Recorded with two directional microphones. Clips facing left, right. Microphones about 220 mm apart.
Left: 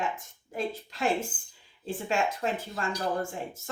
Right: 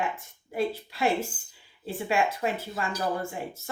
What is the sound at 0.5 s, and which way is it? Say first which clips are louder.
Speech: right 4 dB; 10° right (ahead or behind).